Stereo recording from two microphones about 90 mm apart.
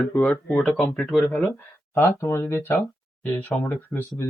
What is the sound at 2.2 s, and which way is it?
Speech, 30° left (ahead or behind).